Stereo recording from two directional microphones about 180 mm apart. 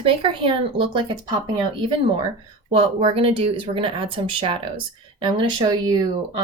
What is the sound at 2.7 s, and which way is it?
Speech, 35° right (ahead or behind).